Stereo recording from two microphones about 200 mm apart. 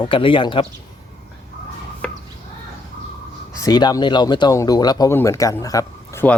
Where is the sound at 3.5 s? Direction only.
20° left (ahead or behind).